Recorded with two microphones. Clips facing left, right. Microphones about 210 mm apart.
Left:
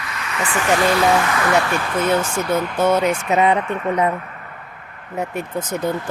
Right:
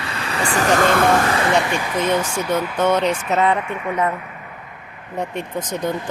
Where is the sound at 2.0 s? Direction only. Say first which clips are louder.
Left 1 dB; 10° left (ahead or behind).